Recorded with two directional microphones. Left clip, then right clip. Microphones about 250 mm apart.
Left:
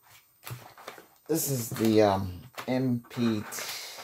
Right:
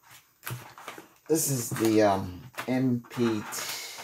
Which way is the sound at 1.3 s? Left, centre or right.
Left.